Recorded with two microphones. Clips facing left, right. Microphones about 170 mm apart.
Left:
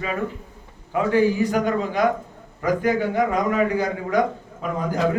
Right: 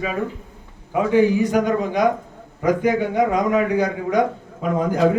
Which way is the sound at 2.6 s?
20° right (ahead or behind).